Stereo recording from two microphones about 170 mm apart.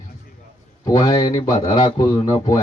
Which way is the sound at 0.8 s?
20° left (ahead or behind).